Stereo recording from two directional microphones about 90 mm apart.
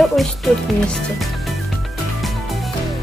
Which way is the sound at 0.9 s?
Centre (ahead or behind).